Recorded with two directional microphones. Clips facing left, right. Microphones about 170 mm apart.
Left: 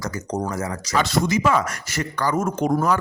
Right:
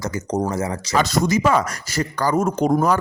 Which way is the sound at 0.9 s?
40° right (ahead or behind).